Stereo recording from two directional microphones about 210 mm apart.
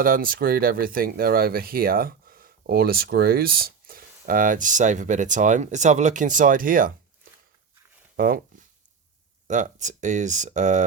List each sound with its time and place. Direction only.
0.0 s speech: 45° right (ahead or behind)
8.1 s a sound: 40° right (ahead or behind)
9.5 s speech: 35° right (ahead or behind)